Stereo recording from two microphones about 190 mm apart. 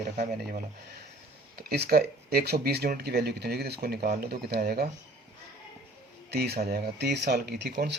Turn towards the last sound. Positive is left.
turn(degrees=-60)  # may be behind; listen again after turning